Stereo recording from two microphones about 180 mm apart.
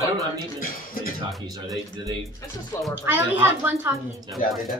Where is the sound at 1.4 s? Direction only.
20° right (ahead or behind).